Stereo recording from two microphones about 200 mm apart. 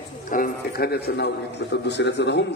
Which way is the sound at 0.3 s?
50° left (ahead or behind).